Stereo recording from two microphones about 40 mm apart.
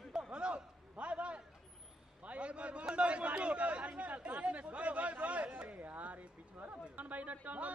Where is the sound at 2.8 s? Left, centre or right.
Right.